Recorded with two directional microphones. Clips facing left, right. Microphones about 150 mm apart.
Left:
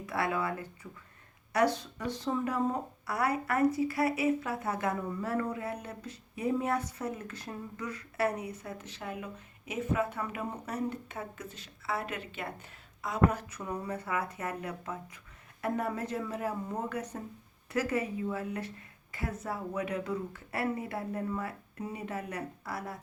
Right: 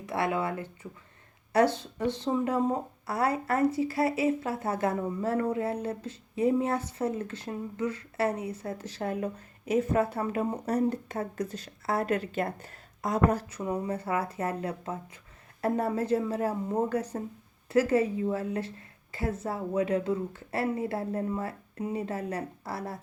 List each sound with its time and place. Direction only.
0.0 s speech: 25° right (ahead or behind); by 13.6 s 40° right (ahead or behind)
13.6 s speech: 25° right (ahead or behind)